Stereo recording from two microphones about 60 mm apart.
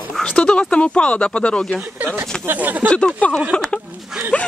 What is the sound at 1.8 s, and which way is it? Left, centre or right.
Speech, right.